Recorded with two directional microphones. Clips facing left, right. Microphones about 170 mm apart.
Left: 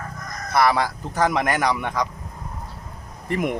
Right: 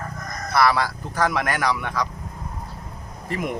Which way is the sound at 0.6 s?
15° left (ahead or behind).